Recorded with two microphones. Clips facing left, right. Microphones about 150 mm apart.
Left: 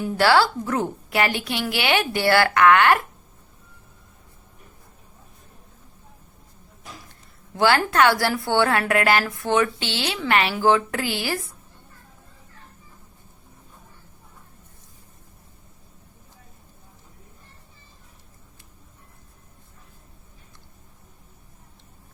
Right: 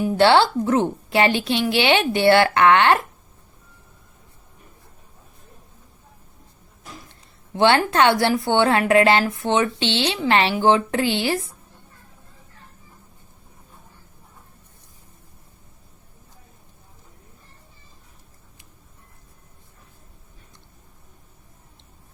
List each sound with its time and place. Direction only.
0.0 s speech: 25° right (ahead or behind)
7.5 s speech: 25° right (ahead or behind)